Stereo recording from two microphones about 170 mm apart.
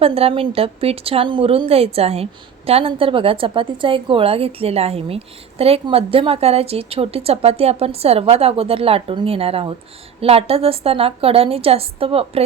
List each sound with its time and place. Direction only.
0.0 s a woman's voice: 35° right (ahead or behind)